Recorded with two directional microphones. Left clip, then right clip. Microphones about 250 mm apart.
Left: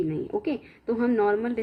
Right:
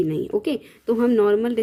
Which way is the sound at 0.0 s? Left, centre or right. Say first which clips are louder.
Right 5 dB; right.